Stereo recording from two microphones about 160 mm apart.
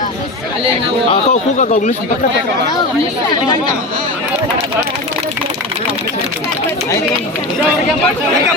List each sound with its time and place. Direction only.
1.1 s speech: 50° left (ahead or behind)